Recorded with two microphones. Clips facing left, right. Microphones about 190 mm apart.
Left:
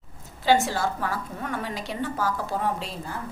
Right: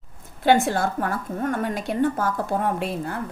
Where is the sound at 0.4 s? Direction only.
55° right (ahead or behind).